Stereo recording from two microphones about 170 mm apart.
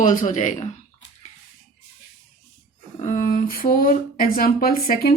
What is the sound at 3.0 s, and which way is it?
Speech, 50° left (ahead or behind).